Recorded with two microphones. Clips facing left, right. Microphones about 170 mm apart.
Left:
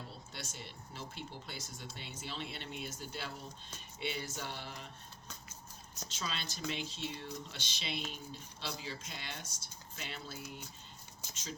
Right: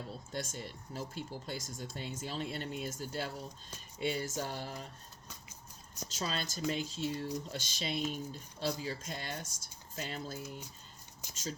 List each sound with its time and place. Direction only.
0.3 s speech: 45° right (ahead or behind)
3.9 s a sound: 40° right (ahead or behind)
6.1 s speech: 40° right (ahead or behind)